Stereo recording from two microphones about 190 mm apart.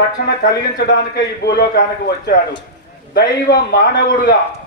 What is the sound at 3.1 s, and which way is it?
A man's voice, 55° left (ahead or behind).